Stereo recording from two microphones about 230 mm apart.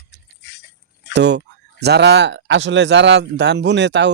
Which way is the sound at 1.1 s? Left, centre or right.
Right.